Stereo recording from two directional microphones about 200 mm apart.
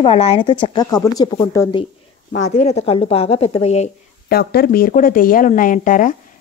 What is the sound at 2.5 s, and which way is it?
Speech, 35° left (ahead or behind).